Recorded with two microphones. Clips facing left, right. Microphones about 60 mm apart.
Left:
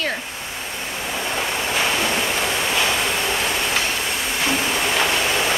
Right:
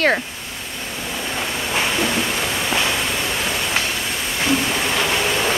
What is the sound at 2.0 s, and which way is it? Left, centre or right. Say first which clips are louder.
Waves: even; centre.